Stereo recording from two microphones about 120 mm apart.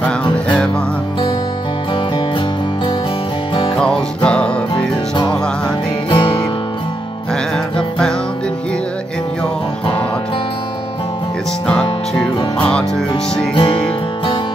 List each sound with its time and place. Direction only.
0.0 s music: 10° left (ahead or behind)
3.8 s music: 10° left (ahead or behind)
4.7 s music: 40° left (ahead or behind)
7.5 s music: 5° left (ahead or behind)
13.6 s music: 45° left (ahead or behind)